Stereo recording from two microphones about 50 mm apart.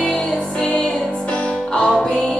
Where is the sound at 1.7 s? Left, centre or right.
Centre.